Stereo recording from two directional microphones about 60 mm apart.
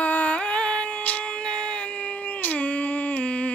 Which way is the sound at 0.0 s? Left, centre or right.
Left.